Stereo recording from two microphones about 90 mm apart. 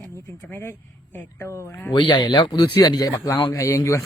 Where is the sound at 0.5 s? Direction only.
25° left (ahead or behind).